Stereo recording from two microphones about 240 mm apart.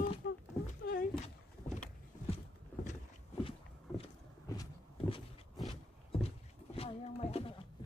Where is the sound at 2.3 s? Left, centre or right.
Left.